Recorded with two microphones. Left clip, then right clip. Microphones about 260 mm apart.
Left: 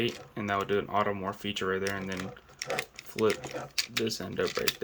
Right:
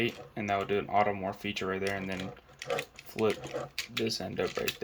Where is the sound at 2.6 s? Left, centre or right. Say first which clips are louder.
Left 1 dB; centre.